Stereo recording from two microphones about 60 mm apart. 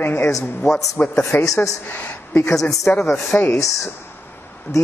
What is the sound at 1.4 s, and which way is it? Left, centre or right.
Speech, left.